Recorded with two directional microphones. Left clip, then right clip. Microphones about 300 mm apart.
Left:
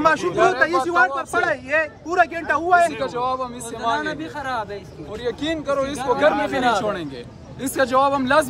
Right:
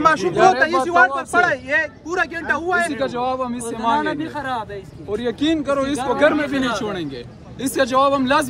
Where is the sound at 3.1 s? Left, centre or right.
Right.